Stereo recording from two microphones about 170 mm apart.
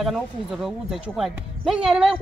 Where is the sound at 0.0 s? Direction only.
Centre (ahead or behind).